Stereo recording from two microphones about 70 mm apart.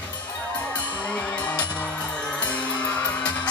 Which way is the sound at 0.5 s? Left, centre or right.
Left.